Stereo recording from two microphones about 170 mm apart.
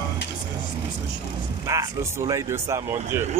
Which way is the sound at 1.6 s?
20° right (ahead or behind).